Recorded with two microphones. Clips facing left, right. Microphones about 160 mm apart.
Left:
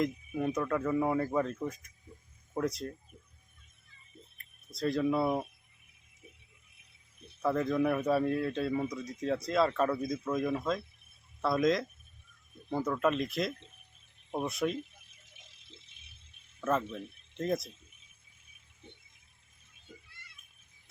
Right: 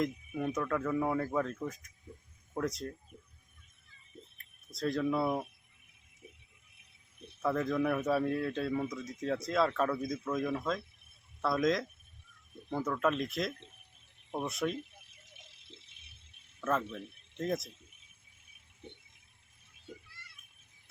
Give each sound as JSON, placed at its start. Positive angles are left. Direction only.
{"t": 0.0, "sound": "speech", "side_deg": 0}
{"t": 4.4, "sound": "speech", "side_deg": 0}
{"t": 7.4, "sound": "speech", "side_deg": 0}
{"t": 15.4, "sound": "rattle", "side_deg": -65}
{"t": 16.9, "sound": "speech", "side_deg": 0}
{"t": 18.8, "sound": "a sound", "side_deg": -65}